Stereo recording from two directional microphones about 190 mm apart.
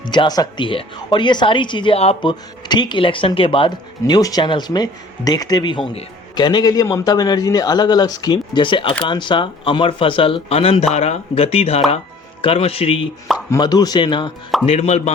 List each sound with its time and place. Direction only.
0.1 s a woman's voice: 20° left (ahead or behind)